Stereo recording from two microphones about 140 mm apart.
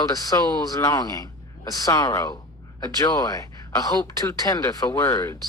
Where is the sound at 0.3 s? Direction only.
20° left (ahead or behind).